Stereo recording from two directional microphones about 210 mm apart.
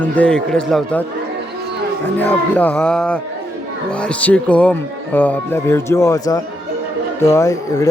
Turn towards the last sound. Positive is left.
turn(degrees=15)  # may be behind; listen again after turning